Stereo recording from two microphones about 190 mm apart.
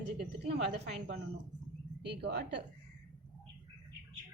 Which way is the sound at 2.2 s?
60° right (ahead or behind).